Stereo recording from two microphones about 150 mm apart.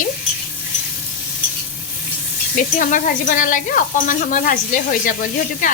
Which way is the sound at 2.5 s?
60° left (ahead or behind).